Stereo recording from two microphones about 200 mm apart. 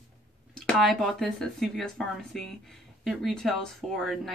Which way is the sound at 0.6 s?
Centre (ahead or behind).